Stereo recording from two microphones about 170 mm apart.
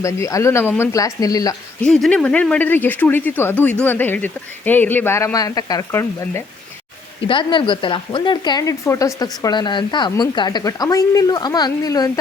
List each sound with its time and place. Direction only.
0.0 s speech: 20° left (ahead or behind)
1.8 s speech: 5° left (ahead or behind)
7.2 s speech: 30° left (ahead or behind)